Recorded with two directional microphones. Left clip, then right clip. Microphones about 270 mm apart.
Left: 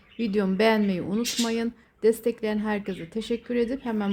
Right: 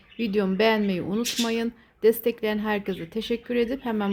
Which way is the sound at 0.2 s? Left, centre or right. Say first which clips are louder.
Right 1 dB; centre.